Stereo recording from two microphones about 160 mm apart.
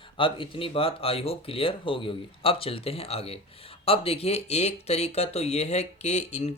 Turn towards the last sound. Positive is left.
turn(degrees=45)  # may be behind; listen again after turning